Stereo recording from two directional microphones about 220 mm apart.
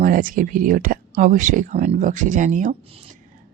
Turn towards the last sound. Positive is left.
turn(degrees=-35)  # may be behind; listen again after turning